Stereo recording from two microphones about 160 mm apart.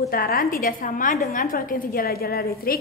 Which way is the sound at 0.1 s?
65° left (ahead or behind).